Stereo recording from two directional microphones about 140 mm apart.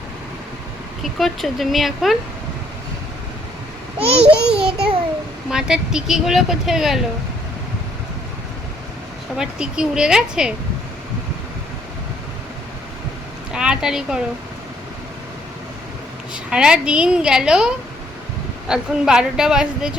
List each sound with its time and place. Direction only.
1.0 s speech: centre (ahead or behind)
3.9 s a child's voice: 45° right (ahead or behind)
4.3 s a sound: 5° right (ahead or behind)
5.5 s speech: 5° right (ahead or behind)
9.4 s speech: 5° right (ahead or behind)
13.5 s speech: 5° right (ahead or behind)
16.3 s speech: 5° right (ahead or behind)
18.7 s speech: 5° right (ahead or behind)